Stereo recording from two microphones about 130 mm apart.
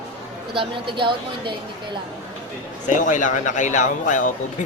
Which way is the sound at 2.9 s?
80° left.